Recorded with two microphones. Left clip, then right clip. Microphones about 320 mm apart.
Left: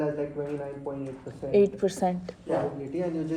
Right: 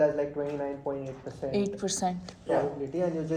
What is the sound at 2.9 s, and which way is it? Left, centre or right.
Speech, right.